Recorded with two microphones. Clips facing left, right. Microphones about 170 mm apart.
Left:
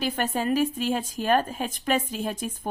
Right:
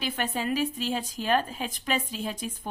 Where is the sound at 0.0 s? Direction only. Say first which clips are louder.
Left 4 dB; 45° left (ahead or behind).